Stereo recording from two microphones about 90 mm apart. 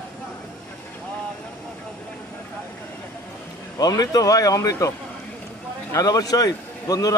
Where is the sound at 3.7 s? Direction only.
45° left (ahead or behind).